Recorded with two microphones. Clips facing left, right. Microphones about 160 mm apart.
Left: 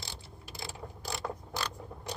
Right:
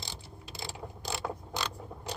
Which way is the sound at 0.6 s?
20° right (ahead or behind).